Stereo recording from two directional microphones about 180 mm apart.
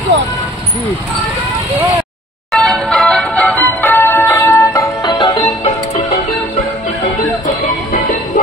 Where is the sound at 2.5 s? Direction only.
Centre (ahead or behind).